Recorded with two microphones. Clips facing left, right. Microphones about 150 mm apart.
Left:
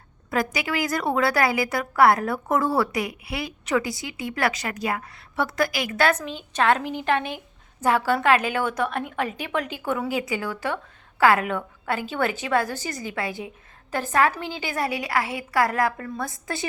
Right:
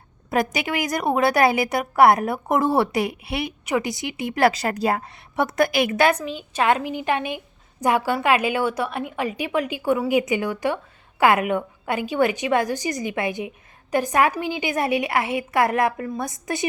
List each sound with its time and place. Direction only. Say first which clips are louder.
0.3 s a woman's voice: right 3 dB; 20° right (ahead or behind)
5.4 s a woman's voice: right 5 dB; 20° right (ahead or behind)
6.1 s a woman's voice: right 2 dB; 10° right (ahead or behind)